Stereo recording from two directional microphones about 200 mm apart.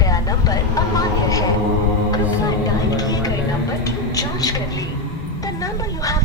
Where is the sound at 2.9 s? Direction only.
20° left (ahead or behind).